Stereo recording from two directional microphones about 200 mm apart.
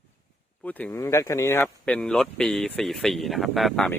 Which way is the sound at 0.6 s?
10° left (ahead or behind).